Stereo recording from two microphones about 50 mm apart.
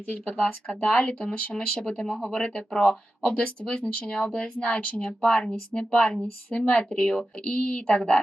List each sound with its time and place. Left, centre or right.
0.3 s speech: centre